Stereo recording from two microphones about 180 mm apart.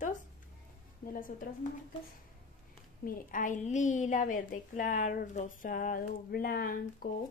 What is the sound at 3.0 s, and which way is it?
A woman's voice, 45° left (ahead or behind).